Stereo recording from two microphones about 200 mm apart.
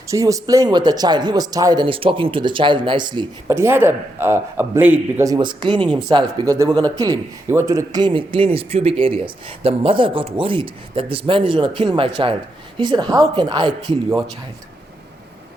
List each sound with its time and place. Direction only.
0.1 s speech: 15° right (ahead or behind)